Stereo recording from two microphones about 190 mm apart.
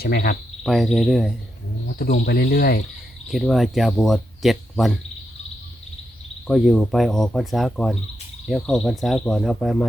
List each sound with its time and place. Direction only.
0.0 s cricket: 50° left (ahead or behind)
0.6 s speech: centre (ahead or behind)
2.2 s cricket: 55° left (ahead or behind)
3.2 s speech: centre (ahead or behind)
6.5 s speech: centre (ahead or behind)